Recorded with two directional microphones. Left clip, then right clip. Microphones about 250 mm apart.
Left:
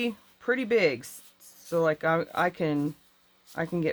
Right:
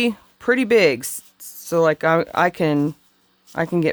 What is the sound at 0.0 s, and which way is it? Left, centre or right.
Speech, right.